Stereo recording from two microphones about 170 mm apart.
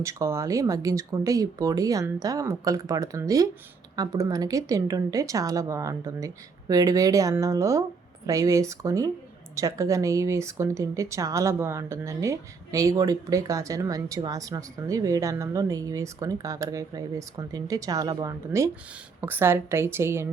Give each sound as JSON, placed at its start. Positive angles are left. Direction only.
{"t": 0.0, "sound": "a woman's voice", "side_deg": -15}